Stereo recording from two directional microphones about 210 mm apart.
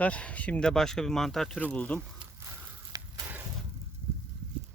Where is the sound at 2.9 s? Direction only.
15° right (ahead or behind).